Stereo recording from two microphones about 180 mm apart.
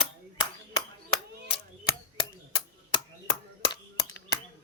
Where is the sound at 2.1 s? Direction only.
25° left (ahead or behind).